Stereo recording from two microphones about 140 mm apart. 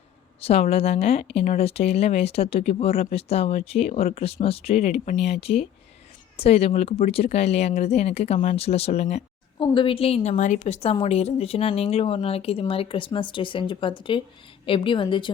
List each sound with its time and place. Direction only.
0.4 s speech: 45° left (ahead or behind)
9.6 s speech: 35° left (ahead or behind)
10.3 s speech: 60° left (ahead or behind); by 15.3 s 35° left (ahead or behind)